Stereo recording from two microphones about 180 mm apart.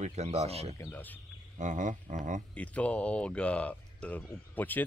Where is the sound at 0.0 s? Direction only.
40° right (ahead or behind).